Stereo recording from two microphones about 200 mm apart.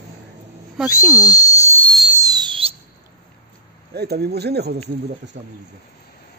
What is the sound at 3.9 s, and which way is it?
Speech, 55° right (ahead or behind).